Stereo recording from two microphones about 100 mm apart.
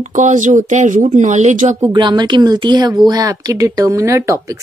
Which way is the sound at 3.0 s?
40° right (ahead or behind).